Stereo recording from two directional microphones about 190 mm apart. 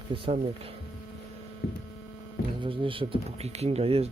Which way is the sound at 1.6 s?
60° left (ahead or behind).